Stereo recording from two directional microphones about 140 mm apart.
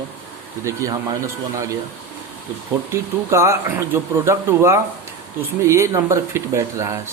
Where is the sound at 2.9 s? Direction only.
20° right (ahead or behind).